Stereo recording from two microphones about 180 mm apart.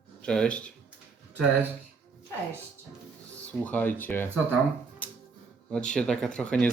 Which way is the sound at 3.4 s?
10° left (ahead or behind).